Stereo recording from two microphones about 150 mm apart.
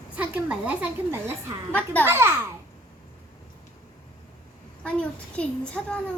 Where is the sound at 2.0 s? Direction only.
15° right (ahead or behind).